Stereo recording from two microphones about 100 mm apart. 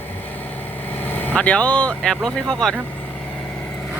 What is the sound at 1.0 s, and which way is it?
Speech, 20° left (ahead or behind).